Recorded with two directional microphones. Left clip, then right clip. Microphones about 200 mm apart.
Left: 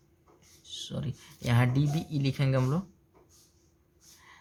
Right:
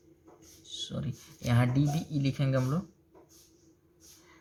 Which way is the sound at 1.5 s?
20° left (ahead or behind).